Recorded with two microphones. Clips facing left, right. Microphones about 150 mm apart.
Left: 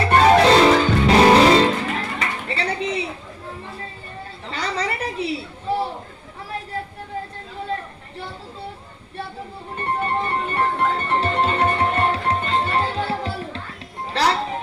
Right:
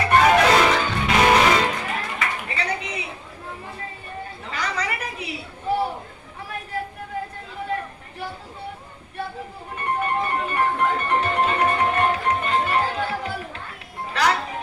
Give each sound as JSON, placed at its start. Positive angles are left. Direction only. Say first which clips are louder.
{"t": 0.0, "sound": "music", "louder": "left 3 dB", "side_deg": 35}
{"t": 4.4, "sound": "chatter", "louder": "left 3 dB", "side_deg": 30}
{"t": 9.7, "sound": "music", "louder": "left 1 dB", "side_deg": 30}